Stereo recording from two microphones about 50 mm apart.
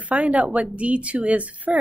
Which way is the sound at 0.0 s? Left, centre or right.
Right.